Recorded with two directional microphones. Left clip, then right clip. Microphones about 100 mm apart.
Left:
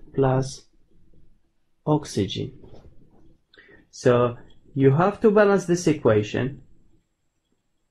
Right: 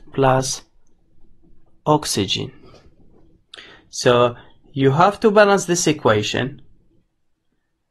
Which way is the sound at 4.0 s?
15° right (ahead or behind).